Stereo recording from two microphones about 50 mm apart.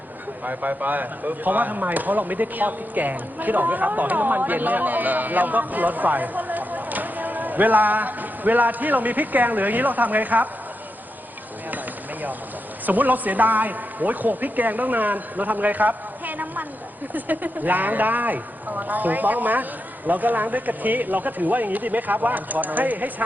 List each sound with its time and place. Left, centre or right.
0.4 s speech: right
12.8 s speech: right